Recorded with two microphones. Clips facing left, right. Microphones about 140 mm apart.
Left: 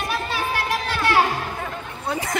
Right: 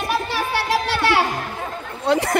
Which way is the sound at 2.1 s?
70° right (ahead or behind).